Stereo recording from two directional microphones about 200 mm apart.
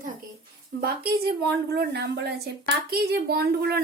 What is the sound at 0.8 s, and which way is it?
A woman's voice, 50° right (ahead or behind).